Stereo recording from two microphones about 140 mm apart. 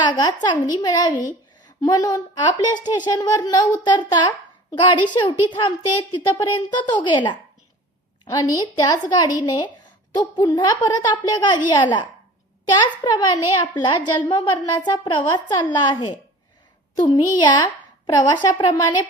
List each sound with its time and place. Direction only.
0.0 s a woman's voice: 30° left (ahead or behind)